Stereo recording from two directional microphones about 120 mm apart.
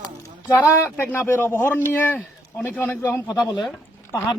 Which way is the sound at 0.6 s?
20° left (ahead or behind).